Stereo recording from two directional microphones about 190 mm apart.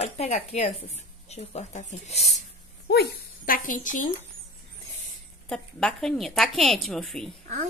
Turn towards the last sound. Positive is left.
turn(degrees=0)  # may be behind; listen again after turning